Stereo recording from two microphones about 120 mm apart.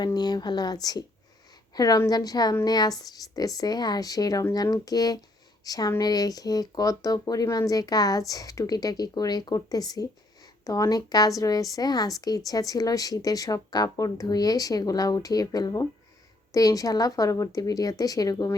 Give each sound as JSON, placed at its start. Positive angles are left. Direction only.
{"t": 0.0, "sound": "a woman's voice", "side_deg": 35}